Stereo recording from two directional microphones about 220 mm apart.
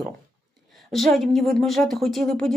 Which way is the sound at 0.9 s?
Centre (ahead or behind).